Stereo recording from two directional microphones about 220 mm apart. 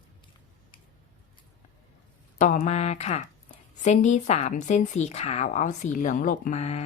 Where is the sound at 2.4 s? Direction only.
35° left (ahead or behind).